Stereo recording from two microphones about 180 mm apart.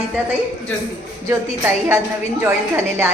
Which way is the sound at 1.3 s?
15° right (ahead or behind).